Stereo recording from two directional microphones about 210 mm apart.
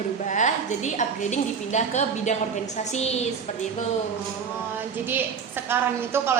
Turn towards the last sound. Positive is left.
turn(degrees=-10)  # may be behind; listen again after turning